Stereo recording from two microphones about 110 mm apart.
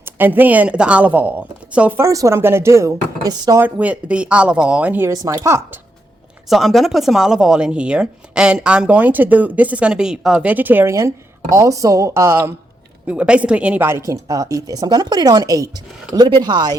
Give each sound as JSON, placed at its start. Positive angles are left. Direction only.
{"t": 0.0, "sound": "speech", "side_deg": -15}
{"t": 2.0, "sound": "speech", "side_deg": -30}
{"t": 3.6, "sound": "speech", "side_deg": -10}
{"t": 5.0, "sound": "speech", "side_deg": -30}
{"t": 6.5, "sound": "speech", "side_deg": 0}
{"t": 13.1, "sound": "speech", "side_deg": -10}